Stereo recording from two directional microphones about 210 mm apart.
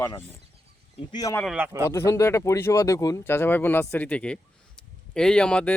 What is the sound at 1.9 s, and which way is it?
Speech, 15° left (ahead or behind).